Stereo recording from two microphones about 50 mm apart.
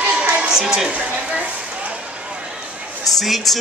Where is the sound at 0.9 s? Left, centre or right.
Right.